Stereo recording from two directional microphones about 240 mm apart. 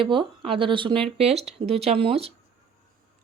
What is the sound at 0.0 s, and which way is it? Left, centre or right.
Speech, right.